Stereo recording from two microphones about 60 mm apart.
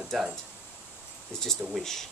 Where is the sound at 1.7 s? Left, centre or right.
Centre.